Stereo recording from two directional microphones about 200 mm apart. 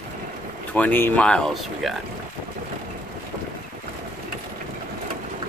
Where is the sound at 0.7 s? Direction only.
10° left (ahead or behind).